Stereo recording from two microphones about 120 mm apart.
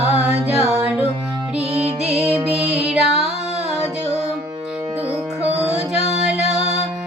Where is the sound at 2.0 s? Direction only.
5° right (ahead or behind).